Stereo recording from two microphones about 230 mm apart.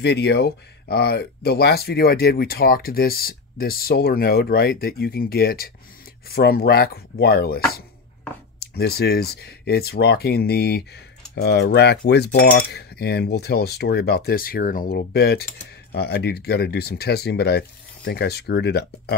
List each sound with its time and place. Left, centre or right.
0.0 s speech: left
8.5 s cutlery: left